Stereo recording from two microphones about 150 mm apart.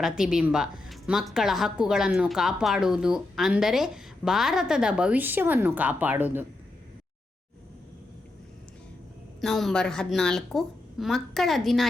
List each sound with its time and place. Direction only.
0.0 s a woman's voice: 5° right (ahead or behind)
9.4 s a woman's voice: centre (ahead or behind)